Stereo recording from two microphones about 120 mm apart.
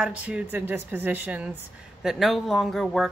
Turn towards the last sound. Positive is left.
turn(degrees=0)  # may be behind; listen again after turning